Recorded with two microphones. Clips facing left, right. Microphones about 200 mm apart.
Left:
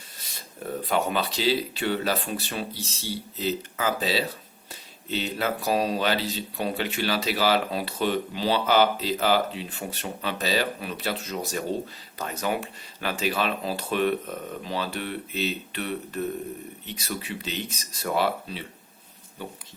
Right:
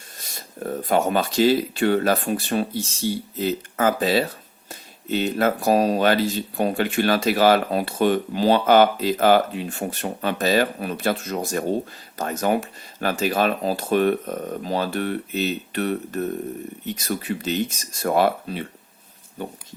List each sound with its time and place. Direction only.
0.2 s speech: 45° right (ahead or behind)